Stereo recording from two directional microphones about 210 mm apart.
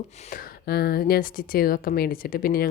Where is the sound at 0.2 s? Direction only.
40° left (ahead or behind).